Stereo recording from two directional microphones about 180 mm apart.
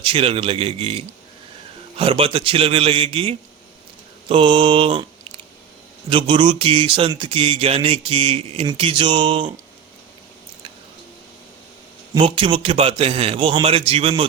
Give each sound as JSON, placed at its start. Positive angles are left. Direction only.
{"t": 0.0, "sound": "speech", "side_deg": -30}
{"t": 6.1, "sound": "speech", "side_deg": -30}
{"t": 12.1, "sound": "speech", "side_deg": -30}